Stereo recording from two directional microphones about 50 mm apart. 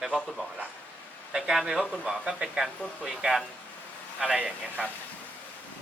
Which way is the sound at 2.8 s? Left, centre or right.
Left.